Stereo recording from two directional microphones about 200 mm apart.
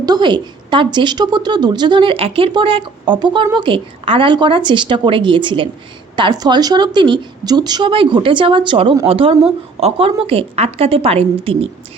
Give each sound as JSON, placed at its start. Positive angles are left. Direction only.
{"t": 0.0, "sound": "a woman's voice", "side_deg": -20}